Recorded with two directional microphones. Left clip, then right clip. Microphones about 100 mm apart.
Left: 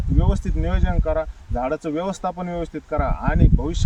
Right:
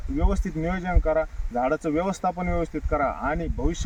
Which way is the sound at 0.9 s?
Centre (ahead or behind).